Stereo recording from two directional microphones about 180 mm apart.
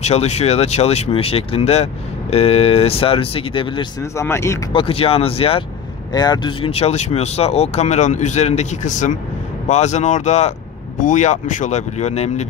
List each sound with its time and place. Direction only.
0.0 s speech: 35° left (ahead or behind)
4.0 s speech: 15° left (ahead or behind)
4.7 s speech: 30° left (ahead or behind)